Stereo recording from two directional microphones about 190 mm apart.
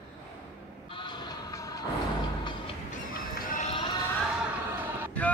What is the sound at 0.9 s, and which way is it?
Vehicle, 25° left (ahead or behind).